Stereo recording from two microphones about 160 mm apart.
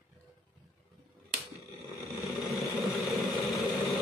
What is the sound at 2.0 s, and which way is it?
Vehicle, centre (ahead or behind).